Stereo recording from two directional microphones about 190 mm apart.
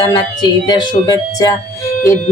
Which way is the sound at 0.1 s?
20° left (ahead or behind).